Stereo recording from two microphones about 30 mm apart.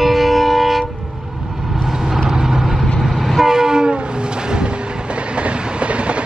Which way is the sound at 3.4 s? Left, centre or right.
Centre.